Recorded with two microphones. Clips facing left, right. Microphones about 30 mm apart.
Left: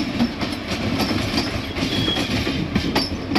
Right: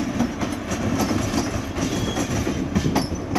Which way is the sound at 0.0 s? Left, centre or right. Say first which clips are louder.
Left 2 dB; left.